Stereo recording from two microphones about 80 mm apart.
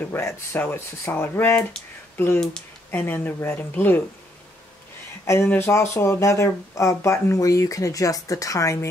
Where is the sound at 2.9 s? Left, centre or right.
Left.